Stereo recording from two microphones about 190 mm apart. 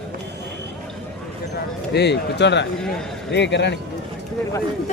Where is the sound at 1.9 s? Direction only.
60° left (ahead or behind).